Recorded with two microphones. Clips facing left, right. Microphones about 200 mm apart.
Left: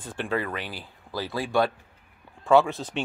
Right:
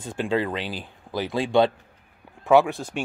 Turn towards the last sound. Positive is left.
turn(degrees=-10)  # may be behind; listen again after turning